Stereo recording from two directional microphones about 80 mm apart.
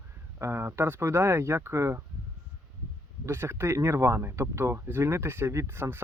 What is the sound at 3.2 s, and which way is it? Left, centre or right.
Speech, right.